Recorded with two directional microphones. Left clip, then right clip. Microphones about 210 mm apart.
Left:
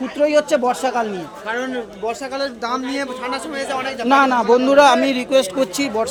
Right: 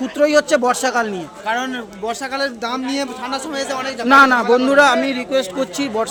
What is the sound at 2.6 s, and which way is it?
A man's voice, 20° right (ahead or behind).